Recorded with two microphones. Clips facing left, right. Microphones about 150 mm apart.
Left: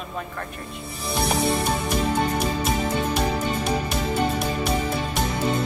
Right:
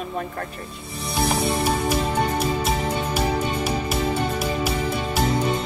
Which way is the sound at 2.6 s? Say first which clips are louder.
Even; 5° right (ahead or behind).